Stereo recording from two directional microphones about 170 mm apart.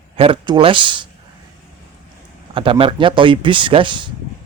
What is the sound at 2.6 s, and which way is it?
Speech, 30° right (ahead or behind).